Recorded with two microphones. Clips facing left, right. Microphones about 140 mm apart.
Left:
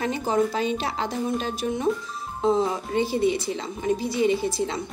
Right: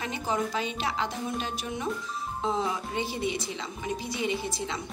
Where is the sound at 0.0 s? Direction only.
35° left (ahead or behind).